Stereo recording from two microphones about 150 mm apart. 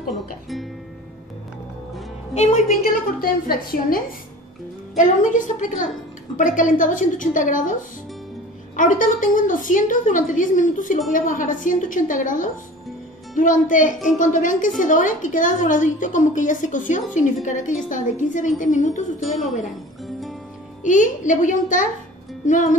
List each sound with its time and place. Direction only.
2.3 s a woman's voice: 45° left (ahead or behind)
2.9 s a woman's voice: 80° left
4.9 s a woman's voice: 60° left (ahead or behind)
8.7 s a woman's voice: 60° left (ahead or behind)
20.8 s a woman's voice: 55° left (ahead or behind)